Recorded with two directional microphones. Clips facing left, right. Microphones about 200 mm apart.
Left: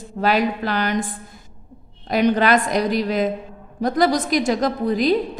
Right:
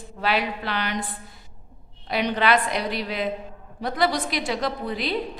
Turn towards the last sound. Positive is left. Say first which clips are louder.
# left 8 dB
turn(degrees=45)  # may be behind; listen again after turning